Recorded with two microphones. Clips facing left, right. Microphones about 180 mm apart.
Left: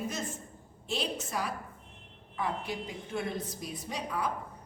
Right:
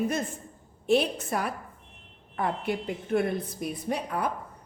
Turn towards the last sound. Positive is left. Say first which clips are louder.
# right 5 dB
turn(degrees=-55)  # may be behind; listen again after turning